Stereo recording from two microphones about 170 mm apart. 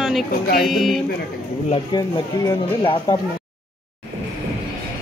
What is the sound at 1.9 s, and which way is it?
Speech, 25° left (ahead or behind).